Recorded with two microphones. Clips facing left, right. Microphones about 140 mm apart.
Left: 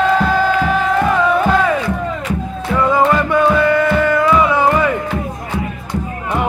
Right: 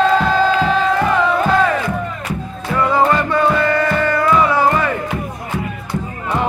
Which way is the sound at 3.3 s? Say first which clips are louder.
Left 3 dB; 15° left (ahead or behind).